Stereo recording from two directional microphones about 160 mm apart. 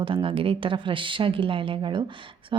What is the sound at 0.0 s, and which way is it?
A woman's voice, 35° right (ahead or behind).